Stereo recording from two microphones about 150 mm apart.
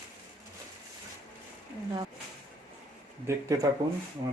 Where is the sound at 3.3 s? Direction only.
20° right (ahead or behind).